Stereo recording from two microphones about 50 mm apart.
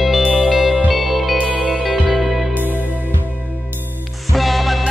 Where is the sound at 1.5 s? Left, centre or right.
Left.